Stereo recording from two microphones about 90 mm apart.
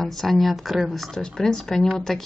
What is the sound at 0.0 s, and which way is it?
Speech, 5° left (ahead or behind).